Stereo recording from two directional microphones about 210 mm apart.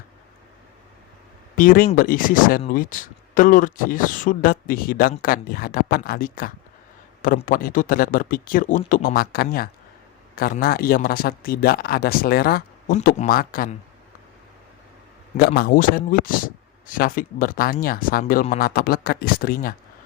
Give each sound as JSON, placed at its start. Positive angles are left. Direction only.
{"t": 1.5, "sound": "speech", "side_deg": 40}
{"t": 15.4, "sound": "speech", "side_deg": 45}